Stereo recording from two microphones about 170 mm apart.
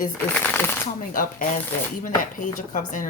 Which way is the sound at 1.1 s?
55° left (ahead or behind).